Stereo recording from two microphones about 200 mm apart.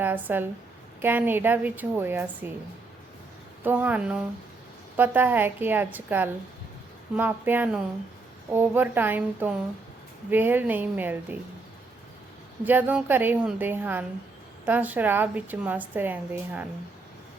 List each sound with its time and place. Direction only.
0.0 s a woman's voice: 10° right (ahead or behind)
3.6 s a woman's voice: 10° right (ahead or behind)
12.6 s a woman's voice: 10° right (ahead or behind)